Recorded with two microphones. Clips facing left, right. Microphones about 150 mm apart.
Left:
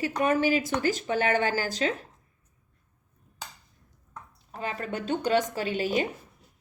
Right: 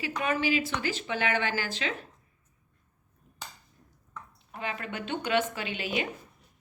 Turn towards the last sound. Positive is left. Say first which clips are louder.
# left 5 dB
turn(degrees=40)  # may be behind; listen again after turning